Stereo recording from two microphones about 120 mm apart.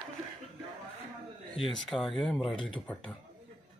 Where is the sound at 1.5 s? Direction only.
Centre (ahead or behind).